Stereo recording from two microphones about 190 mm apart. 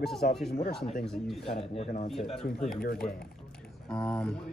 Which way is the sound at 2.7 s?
50° left (ahead or behind).